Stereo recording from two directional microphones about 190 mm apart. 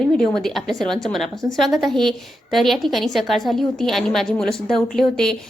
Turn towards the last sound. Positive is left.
turn(degrees=0)  # may be behind; listen again after turning